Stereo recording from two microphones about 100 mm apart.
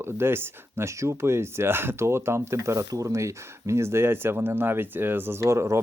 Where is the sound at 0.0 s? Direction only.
25° right (ahead or behind).